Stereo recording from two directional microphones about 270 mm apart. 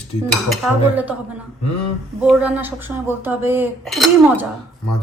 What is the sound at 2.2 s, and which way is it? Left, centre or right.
A woman's voice, centre.